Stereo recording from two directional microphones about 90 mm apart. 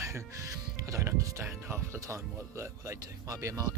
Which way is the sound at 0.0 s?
35° right (ahead or behind).